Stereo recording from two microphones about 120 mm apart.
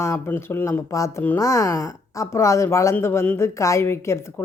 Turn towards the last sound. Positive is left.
turn(degrees=20)  # may be behind; listen again after turning